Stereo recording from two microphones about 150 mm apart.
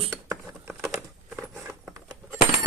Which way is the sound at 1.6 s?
Centre (ahead or behind).